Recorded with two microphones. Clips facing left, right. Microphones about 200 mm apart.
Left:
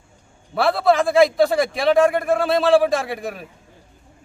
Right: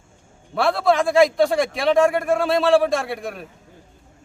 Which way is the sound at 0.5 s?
Centre (ahead or behind).